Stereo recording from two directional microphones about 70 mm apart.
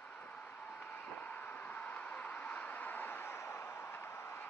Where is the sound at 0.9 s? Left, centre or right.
Left.